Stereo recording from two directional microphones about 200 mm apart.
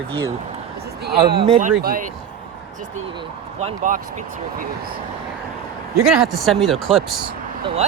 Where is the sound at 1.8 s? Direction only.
45° right (ahead or behind).